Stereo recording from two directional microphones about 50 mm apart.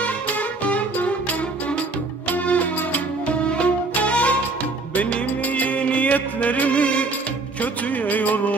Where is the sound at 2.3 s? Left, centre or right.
Left.